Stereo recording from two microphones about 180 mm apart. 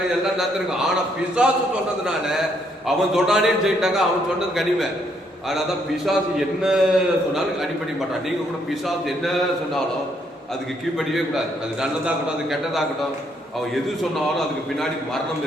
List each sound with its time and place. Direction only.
0.3 s a man's voice: centre (ahead or behind)
6.6 s a man's voice: 5° right (ahead or behind)
9.0 s a man's voice: centre (ahead or behind)
10.9 s a man's voice: centre (ahead or behind)
14.3 s a man's voice: centre (ahead or behind)